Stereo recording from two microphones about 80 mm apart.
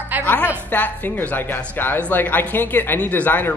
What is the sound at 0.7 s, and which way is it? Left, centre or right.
Speech, left.